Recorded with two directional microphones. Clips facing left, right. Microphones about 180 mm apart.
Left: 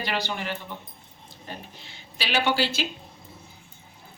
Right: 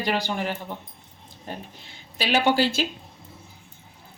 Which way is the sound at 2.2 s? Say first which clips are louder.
Right 4 dB; 45° right (ahead or behind).